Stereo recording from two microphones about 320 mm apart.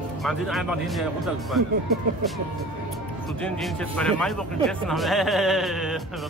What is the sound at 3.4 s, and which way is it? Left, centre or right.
Speech, centre.